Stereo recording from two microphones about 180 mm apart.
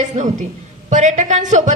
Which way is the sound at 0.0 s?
40° right (ahead or behind).